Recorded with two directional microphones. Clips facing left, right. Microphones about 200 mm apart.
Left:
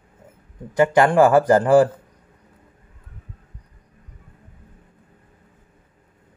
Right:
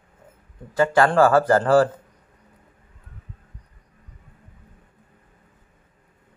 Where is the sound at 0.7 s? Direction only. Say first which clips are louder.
Left 2 dB; 20° left (ahead or behind).